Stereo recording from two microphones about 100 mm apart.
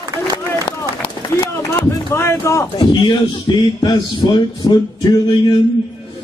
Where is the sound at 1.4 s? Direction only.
25° left (ahead or behind).